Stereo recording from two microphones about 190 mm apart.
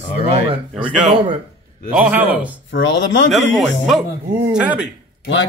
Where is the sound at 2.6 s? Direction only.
75° left (ahead or behind).